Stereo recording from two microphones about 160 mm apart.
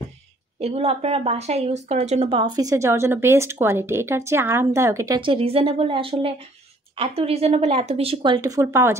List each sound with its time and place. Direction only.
0.6 s speech: 40° right (ahead or behind); by 5.2 s 20° right (ahead or behind)
5.2 s a woman's voice: 35° right (ahead or behind); by 8.9 s 20° right (ahead or behind)